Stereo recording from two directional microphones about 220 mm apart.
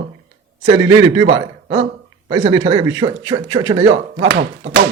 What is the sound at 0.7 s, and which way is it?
A man's voice, 15° right (ahead or behind).